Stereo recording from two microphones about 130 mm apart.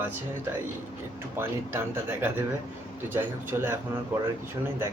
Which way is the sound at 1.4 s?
15° right (ahead or behind).